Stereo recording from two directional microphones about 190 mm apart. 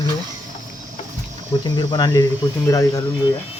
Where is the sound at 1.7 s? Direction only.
20° left (ahead or behind).